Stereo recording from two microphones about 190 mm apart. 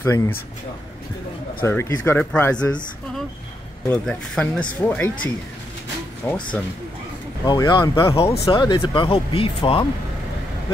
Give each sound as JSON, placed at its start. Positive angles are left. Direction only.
{"t": 1.6, "sound": "speech", "side_deg": 15}
{"t": 3.8, "sound": "speech", "side_deg": 5}
{"t": 7.4, "sound": "speech", "side_deg": 20}